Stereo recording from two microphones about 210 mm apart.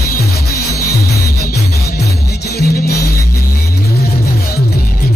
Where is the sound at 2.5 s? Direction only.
50° left (ahead or behind).